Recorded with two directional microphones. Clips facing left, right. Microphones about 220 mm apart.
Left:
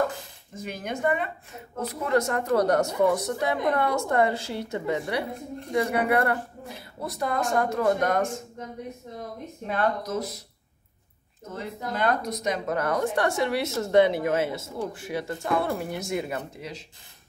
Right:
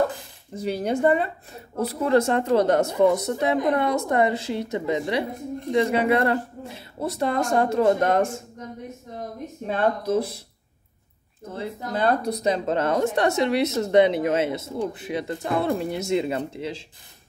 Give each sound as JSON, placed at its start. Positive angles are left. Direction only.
{"t": 0.6, "sound": "a woman's voice", "side_deg": -35}
{"t": 9.7, "sound": "speech", "side_deg": -30}
{"t": 11.4, "sound": "a woman's voice", "side_deg": -35}